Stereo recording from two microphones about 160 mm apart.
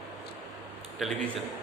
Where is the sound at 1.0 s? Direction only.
Centre (ahead or behind).